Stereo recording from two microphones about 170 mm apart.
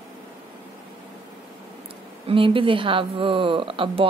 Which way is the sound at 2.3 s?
30° right (ahead or behind).